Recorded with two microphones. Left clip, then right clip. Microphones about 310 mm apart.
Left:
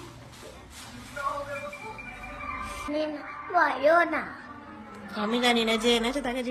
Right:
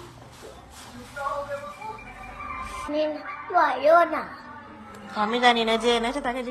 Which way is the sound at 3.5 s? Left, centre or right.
Centre.